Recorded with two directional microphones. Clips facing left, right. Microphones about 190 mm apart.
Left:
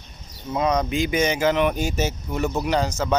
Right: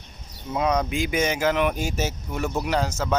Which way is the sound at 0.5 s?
5° right (ahead or behind).